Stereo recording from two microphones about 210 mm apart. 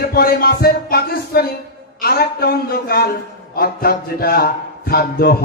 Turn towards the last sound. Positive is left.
turn(degrees=45)  # may be behind; listen again after turning